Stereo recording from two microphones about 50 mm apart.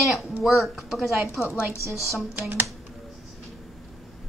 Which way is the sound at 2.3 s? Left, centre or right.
Right.